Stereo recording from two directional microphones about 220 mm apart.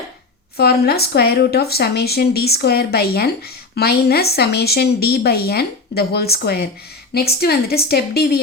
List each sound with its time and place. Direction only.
0.5 s a woman's voice: 45° left (ahead or behind)